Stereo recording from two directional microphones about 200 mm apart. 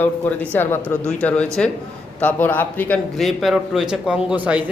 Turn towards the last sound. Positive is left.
turn(degrees=-5)  # may be behind; listen again after turning